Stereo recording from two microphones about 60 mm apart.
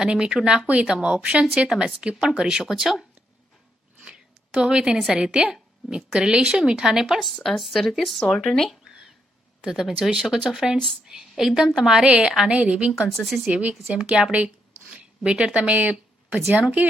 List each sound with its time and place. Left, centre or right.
0.0 s a woman's voice: centre
4.0 s a sound: centre
5.1 s a woman's voice: centre
8.2 s speech: centre
9.6 s a woman's voice: centre
12.0 s a woman's voice: centre
13.1 s a woman's voice: centre
13.5 s a woman's voice: right
14.0 s a woman's voice: centre